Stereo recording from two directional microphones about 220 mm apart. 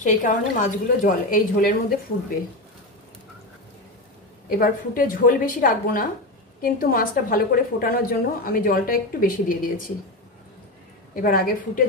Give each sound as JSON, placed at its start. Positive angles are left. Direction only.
{"t": 0.0, "sound": "a woman's voice", "side_deg": 35}
{"t": 4.5, "sound": "a woman's voice", "side_deg": 40}
{"t": 11.1, "sound": "a woman's voice", "side_deg": 40}